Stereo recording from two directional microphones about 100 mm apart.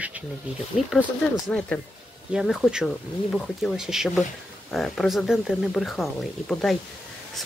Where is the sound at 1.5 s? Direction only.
15° left (ahead or behind).